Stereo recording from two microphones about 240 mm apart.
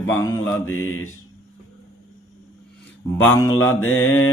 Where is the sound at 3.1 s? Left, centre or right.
Centre.